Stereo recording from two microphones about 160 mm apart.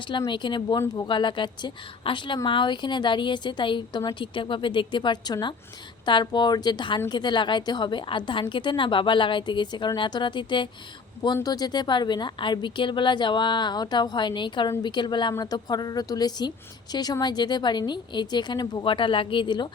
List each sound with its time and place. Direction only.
0.0 s a woman's voice: 30° left (ahead or behind)